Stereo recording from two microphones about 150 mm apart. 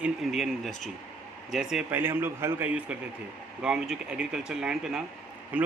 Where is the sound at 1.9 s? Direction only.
15° right (ahead or behind).